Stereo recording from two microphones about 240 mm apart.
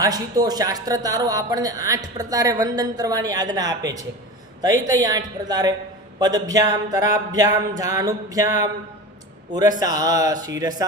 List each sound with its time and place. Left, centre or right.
0.0 s speech: centre